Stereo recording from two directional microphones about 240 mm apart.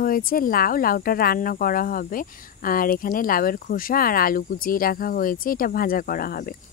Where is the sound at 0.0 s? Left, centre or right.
Left.